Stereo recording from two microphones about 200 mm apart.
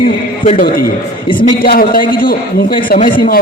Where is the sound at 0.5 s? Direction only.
50° left (ahead or behind).